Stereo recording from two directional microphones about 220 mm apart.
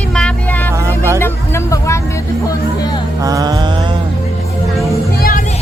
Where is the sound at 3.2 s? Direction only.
15° right (ahead or behind).